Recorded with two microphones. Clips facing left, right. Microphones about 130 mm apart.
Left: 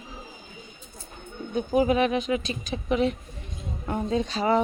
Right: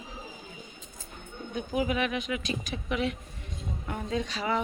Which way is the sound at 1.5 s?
30° left (ahead or behind).